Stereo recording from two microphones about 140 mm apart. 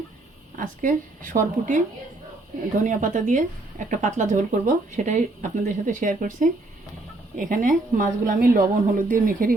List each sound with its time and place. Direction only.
0.5 s a woman's voice: 75° right (ahead or behind)
2.8 s a woman's voice: 60° right (ahead or behind); by 9.6 s 80° right